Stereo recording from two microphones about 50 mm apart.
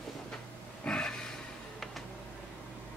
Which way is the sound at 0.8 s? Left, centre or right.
Centre.